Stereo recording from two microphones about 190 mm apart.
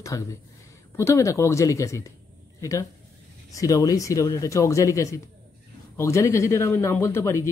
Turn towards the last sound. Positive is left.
turn(degrees=15)  # may be behind; listen again after turning